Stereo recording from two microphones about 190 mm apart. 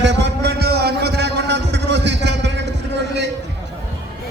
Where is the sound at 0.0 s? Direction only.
65° right (ahead or behind).